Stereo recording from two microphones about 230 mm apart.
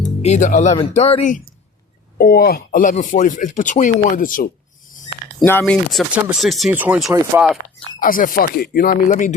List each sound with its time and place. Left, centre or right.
0.2 s speech: left
5.4 s speech: centre
7.9 s speech: left